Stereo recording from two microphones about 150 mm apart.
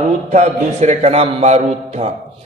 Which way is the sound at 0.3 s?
50° right (ahead or behind).